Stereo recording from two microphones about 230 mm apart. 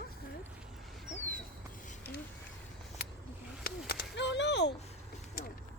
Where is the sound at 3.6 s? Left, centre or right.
Left.